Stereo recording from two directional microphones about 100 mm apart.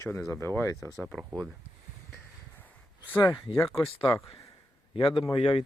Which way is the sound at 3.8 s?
30° left (ahead or behind).